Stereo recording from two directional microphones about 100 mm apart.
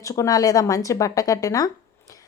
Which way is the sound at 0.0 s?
35° left (ahead or behind).